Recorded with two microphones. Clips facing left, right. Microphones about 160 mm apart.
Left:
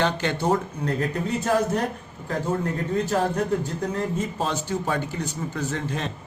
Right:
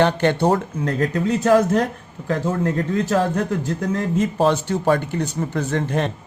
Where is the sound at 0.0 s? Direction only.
60° right (ahead or behind).